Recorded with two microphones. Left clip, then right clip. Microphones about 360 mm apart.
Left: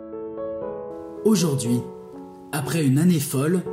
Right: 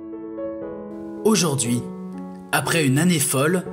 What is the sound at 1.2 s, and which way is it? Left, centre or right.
Speech, right.